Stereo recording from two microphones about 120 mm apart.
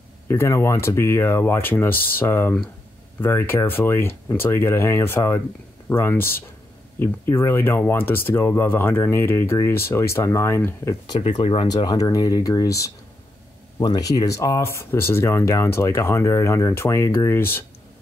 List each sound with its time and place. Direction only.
0.3 s speech: 20° left (ahead or behind)
11.6 s speech: 35° left (ahead or behind); by 17.6 s 20° left (ahead or behind)